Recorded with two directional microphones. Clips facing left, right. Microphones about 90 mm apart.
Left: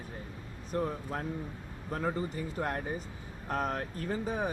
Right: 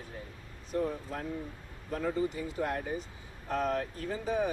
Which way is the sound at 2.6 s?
45° left (ahead or behind).